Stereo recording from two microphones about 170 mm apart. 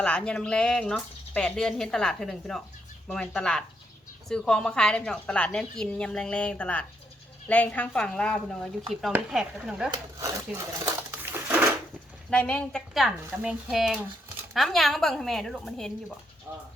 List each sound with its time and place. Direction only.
0.0 s speech: 5° left (ahead or behind)
9.9 s speech: 20° right (ahead or behind)
12.3 s speech: 5° left (ahead or behind)
16.5 s speech: 10° right (ahead or behind)